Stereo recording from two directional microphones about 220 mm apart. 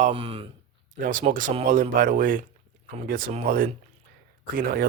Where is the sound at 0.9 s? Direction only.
35° right (ahead or behind).